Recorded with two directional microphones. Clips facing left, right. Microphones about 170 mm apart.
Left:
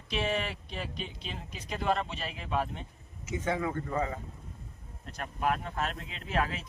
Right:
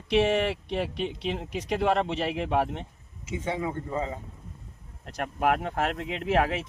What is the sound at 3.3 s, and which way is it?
Speech, 15° right (ahead or behind).